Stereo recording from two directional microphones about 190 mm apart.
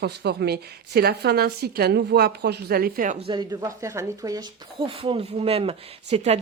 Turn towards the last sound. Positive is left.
turn(degrees=-35)  # may be behind; listen again after turning